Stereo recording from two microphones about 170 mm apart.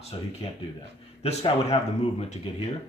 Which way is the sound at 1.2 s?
35° left (ahead or behind).